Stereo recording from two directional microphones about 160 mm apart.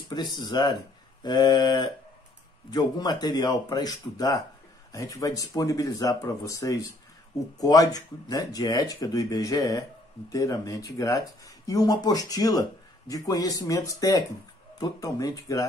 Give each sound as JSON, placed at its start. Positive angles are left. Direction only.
{"t": 0.1, "sound": "speech", "side_deg": 30}